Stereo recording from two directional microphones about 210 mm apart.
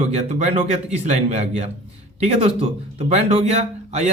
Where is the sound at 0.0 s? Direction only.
30° right (ahead or behind).